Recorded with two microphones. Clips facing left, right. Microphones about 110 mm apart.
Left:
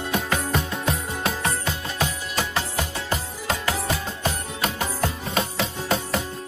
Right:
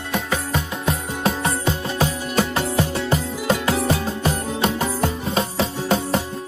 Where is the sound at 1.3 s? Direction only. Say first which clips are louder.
Right 5 dB; 35° right (ahead or behind).